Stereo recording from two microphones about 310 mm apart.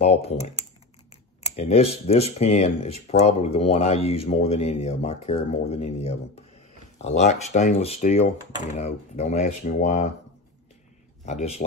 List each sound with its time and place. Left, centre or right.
0.0 s speech: centre
11.2 s speech: left